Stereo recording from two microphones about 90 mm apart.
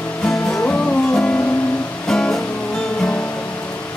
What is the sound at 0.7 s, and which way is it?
Music, 15° left (ahead or behind).